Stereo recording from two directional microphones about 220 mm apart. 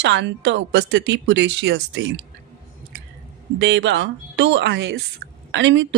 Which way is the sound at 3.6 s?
55° right (ahead or behind).